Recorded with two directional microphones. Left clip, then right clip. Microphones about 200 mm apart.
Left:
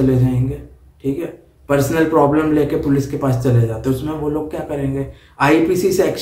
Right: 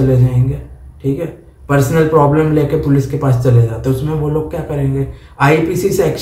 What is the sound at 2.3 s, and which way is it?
A man's voice, 25° left (ahead or behind).